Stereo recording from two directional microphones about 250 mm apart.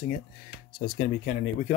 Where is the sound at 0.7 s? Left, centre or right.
Left.